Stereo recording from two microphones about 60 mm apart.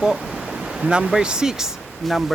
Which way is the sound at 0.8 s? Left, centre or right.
Right.